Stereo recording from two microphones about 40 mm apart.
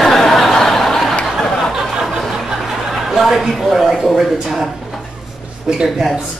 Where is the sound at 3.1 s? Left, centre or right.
Centre.